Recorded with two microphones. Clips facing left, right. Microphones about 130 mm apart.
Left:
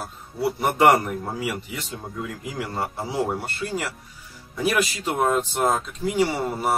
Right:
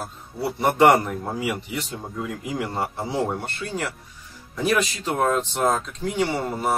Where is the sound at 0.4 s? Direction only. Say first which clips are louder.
Right 1 dB; centre (ahead or behind).